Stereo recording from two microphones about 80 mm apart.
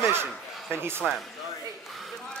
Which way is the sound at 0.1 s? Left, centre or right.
Right.